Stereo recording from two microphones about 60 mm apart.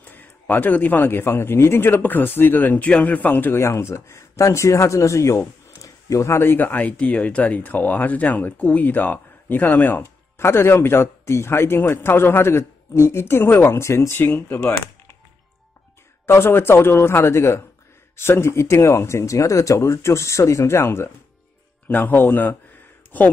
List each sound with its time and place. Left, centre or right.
0.0 s a man's voice: left
5.8 s a sound: left
6.3 s speech: left
10.0 s speech: left
14.2 s a man's voice: left
16.3 s a man's voice: left
21.8 s a man's voice: left